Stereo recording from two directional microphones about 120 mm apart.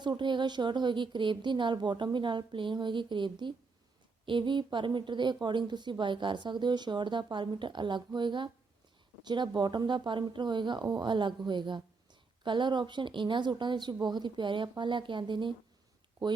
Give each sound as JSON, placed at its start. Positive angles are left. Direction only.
{"t": 0.0, "sound": "a woman's voice", "side_deg": -40}